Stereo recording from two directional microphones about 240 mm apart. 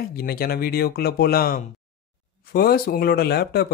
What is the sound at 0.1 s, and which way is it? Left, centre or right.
Speech, left.